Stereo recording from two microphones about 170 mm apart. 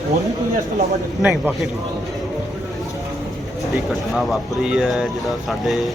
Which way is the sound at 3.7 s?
Centre (ahead or behind).